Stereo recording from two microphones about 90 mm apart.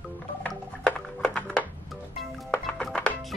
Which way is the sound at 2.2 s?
5° left (ahead or behind).